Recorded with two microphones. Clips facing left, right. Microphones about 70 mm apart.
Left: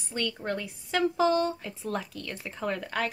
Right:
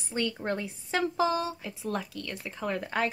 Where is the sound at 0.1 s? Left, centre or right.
Centre.